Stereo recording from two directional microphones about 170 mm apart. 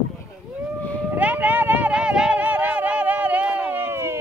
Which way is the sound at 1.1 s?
10° right (ahead or behind).